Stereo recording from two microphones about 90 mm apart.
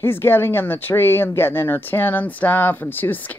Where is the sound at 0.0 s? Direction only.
25° left (ahead or behind).